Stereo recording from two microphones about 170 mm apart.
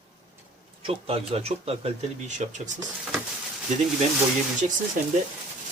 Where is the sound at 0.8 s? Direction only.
35° right (ahead or behind).